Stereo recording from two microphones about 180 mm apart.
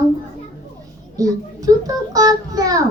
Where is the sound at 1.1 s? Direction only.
20° right (ahead or behind).